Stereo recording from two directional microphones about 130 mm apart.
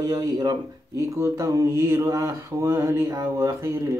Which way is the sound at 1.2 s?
25° right (ahead or behind).